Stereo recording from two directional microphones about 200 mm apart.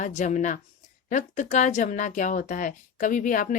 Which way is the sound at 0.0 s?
35° left (ahead or behind).